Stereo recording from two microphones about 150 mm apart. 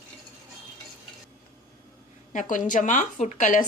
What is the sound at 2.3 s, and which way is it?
A woman's voice, 60° left (ahead or behind).